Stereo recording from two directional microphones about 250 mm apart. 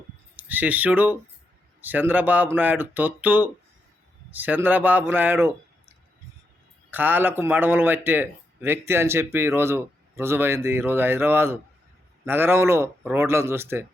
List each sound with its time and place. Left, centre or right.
0.3 s a man's voice: centre
6.9 s a man's voice: centre